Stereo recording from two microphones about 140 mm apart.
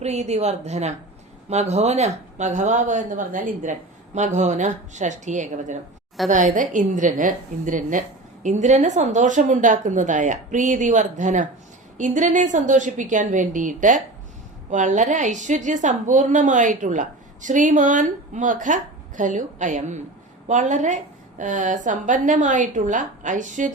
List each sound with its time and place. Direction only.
0.0 s a woman's voice: 50° right (ahead or behind)